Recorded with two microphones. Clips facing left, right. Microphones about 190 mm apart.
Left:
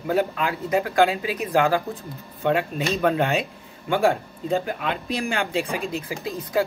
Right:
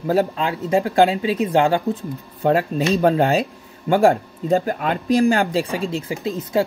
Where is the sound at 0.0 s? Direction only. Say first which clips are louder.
Right 4 dB; 35° right (ahead or behind).